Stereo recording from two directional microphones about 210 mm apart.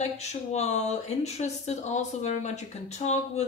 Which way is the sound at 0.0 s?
30° left (ahead or behind).